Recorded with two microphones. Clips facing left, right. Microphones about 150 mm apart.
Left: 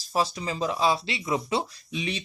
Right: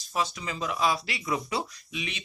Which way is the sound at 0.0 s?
35° left (ahead or behind).